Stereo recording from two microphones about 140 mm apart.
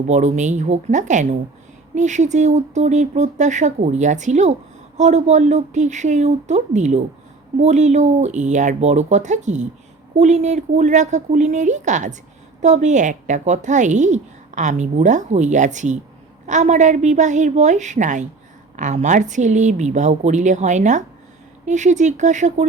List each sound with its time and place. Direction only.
0.1 s a woman's voice: 55° right (ahead or behind)